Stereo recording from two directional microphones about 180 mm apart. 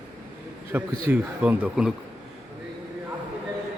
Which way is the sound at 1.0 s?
10° right (ahead or behind).